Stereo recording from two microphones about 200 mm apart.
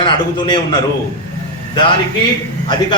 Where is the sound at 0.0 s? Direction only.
25° left (ahead or behind).